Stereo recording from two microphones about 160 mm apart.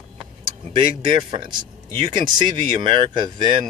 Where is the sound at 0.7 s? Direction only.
30° right (ahead or behind).